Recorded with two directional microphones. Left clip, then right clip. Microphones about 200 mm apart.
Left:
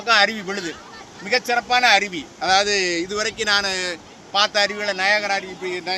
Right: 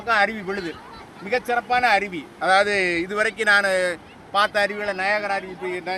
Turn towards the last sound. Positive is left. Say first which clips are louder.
# left 2 dB
turn(degrees=-15)  # may be behind; listen again after turning